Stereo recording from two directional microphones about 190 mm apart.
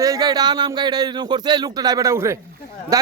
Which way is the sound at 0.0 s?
20° right (ahead or behind).